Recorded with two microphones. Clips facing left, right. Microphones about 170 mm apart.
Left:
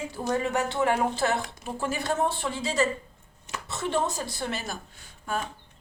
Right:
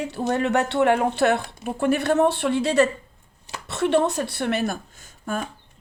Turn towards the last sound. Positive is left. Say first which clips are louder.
# right 3 dB
turn(degrees=-45)  # may be behind; listen again after turning